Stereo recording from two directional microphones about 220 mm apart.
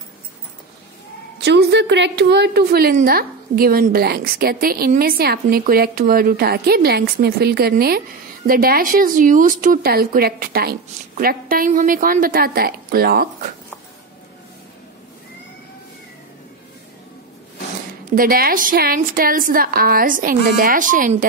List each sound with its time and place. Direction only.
1.4 s a woman's voice: 50° right (ahead or behind)
18.1 s speech: 40° right (ahead or behind)